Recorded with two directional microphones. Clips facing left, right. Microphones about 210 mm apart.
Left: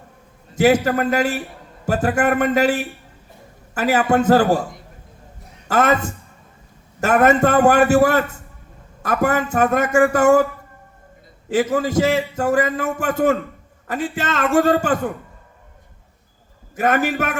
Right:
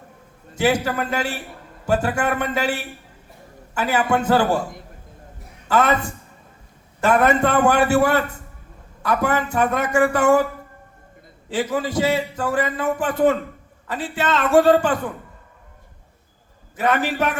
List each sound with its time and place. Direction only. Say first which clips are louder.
0.5 s a man's voice: left 5 dB; 40° left (ahead or behind)
5.6 s a man's voice: left 1 dB; 40° left (ahead or behind)
11.5 s a man's voice: left 4 dB; 45° left (ahead or behind)
16.7 s a man's voice: left 2 dB; 45° left (ahead or behind)